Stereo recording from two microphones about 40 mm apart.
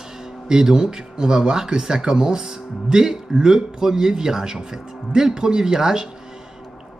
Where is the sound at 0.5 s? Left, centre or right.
Centre.